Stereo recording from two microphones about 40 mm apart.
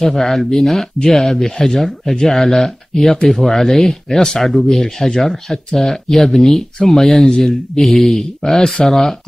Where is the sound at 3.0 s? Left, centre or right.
Centre.